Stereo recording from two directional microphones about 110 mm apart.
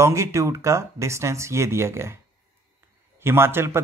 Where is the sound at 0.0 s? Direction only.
25° right (ahead or behind).